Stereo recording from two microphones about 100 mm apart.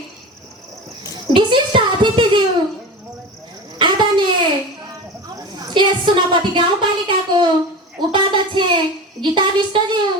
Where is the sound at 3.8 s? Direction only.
50° right (ahead or behind).